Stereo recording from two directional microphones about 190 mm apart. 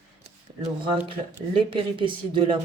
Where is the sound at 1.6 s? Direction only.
25° right (ahead or behind).